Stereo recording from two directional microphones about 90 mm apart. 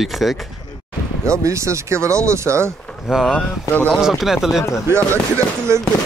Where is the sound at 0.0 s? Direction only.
Centre (ahead or behind).